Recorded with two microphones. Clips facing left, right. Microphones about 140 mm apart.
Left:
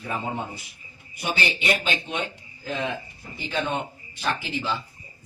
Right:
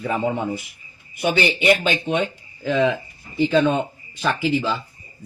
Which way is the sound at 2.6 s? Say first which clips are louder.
Right 10 dB; 90° right.